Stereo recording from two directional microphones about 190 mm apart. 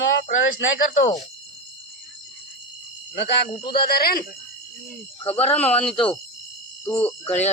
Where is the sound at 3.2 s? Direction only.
65° left (ahead or behind).